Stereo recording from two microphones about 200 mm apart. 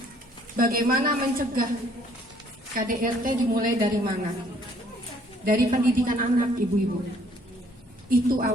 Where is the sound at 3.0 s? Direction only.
45° right (ahead or behind).